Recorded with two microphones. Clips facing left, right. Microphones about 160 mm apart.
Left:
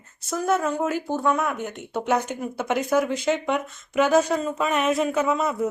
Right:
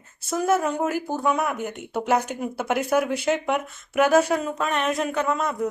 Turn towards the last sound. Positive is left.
turn(degrees=5)  # may be behind; listen again after turning